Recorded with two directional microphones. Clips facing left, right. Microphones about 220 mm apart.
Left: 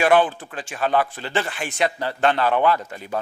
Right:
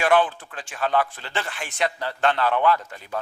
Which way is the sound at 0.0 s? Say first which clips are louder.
Left 3 dB; 10° left (ahead or behind).